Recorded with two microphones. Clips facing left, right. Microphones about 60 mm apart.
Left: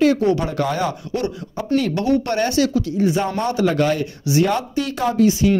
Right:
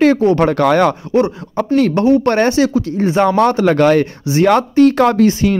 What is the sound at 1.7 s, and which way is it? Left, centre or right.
Speech, right.